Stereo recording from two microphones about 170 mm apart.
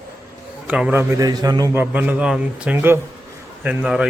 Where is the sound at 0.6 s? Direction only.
5° right (ahead or behind).